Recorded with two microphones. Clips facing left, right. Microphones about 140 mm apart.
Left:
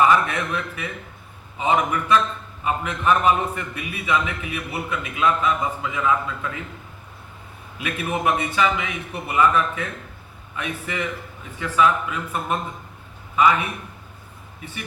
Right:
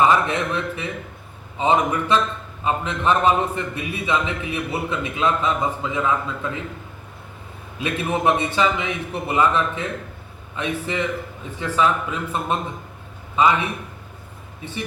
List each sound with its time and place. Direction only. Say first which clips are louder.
0.0 s a man's voice: right 1 dB; 25° right (ahead or behind)
7.8 s a man's voice: right 3 dB; 30° right (ahead or behind)